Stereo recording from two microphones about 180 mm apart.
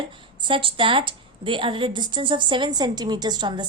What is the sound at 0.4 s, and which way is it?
A woman's voice, 30° right (ahead or behind).